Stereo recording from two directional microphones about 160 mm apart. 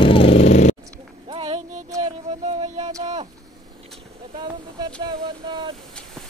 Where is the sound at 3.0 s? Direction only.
40° right (ahead or behind).